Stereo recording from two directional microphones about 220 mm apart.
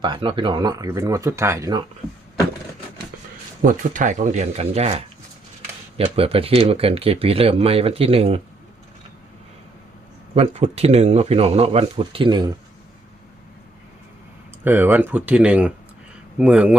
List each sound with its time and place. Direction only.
0.0 s speech: 20° right (ahead or behind)
3.6 s speech: 35° right (ahead or behind)
6.1 s speech: 25° right (ahead or behind)
10.3 s speech: 30° right (ahead or behind)
14.6 s speech: 10° right (ahead or behind)